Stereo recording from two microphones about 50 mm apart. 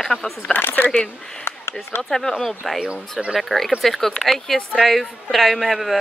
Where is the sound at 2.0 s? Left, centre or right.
Centre.